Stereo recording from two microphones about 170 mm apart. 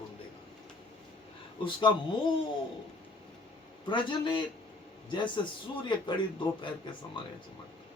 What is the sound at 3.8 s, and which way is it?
Speech, 30° left (ahead or behind).